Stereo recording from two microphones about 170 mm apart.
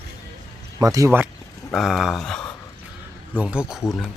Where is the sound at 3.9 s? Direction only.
10° left (ahead or behind).